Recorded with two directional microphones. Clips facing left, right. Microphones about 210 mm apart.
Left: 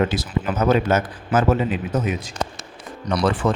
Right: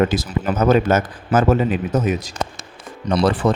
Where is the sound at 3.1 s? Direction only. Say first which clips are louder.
Right 3 dB; 35° right (ahead or behind).